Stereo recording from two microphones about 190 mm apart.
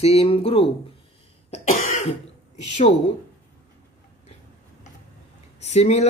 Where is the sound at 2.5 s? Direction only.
35° left (ahead or behind).